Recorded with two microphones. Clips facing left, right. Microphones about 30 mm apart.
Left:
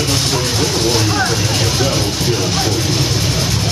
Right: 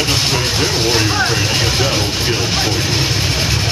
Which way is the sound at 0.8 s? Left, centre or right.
Centre.